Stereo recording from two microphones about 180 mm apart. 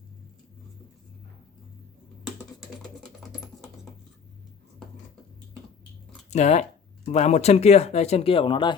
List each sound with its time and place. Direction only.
6.3 s speech: 40° left (ahead or behind)